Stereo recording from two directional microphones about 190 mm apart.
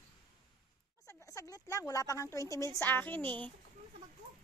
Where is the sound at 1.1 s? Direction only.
15° left (ahead or behind).